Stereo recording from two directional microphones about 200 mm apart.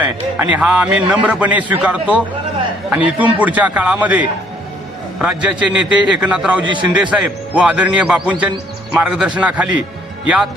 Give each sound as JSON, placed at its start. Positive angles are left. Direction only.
{"t": 0.5, "sound": "a man's voice", "side_deg": -5}